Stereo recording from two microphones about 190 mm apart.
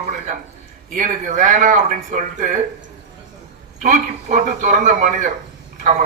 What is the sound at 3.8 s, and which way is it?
Speech, 40° right (ahead or behind).